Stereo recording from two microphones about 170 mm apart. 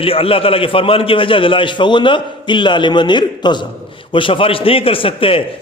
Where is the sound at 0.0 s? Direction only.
35° left (ahead or behind).